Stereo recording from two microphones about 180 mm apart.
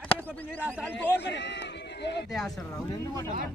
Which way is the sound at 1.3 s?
70° left (ahead or behind).